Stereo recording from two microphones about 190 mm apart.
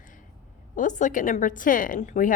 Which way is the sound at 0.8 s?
40° left (ahead or behind).